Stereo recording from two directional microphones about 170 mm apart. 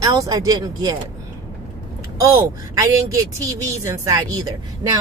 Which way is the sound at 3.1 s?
20° right (ahead or behind).